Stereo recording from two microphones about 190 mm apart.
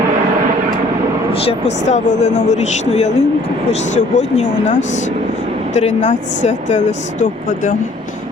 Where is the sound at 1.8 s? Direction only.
40° left (ahead or behind).